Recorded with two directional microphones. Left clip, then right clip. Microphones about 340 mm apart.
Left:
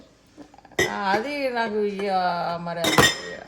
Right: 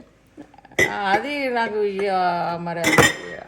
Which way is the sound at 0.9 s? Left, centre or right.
Right.